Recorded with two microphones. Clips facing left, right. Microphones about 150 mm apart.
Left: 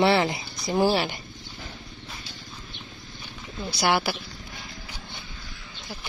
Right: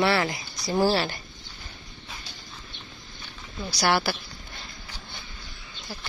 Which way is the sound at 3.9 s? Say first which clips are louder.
Even; 15° left (ahead or behind).